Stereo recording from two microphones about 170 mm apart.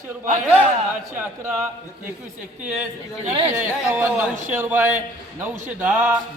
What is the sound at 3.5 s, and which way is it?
A man's voice, 10° right (ahead or behind).